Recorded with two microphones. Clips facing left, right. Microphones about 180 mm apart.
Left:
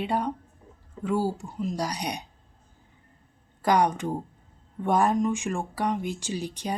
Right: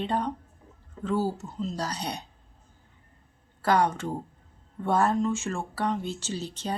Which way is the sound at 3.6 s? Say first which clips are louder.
Left 1 dB; 15° left (ahead or behind).